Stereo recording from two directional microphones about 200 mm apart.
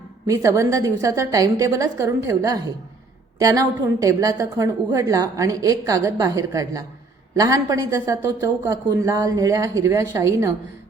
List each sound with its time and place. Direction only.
0.3 s a woman's voice: 15° right (ahead or behind)